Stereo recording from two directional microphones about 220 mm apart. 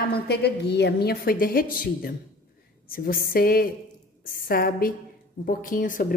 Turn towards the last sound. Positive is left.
turn(degrees=35)  # may be behind; listen again after turning